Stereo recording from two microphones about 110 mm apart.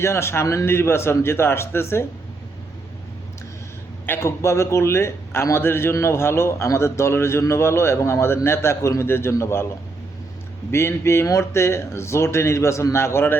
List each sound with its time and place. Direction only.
0.0 s a man's voice: 25° left (ahead or behind)
4.0 s a man's voice: 20° left (ahead or behind)
10.7 s a man's voice: 25° left (ahead or behind)